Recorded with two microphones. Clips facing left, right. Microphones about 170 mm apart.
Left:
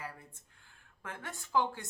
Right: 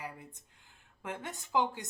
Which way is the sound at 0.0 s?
15° right (ahead or behind).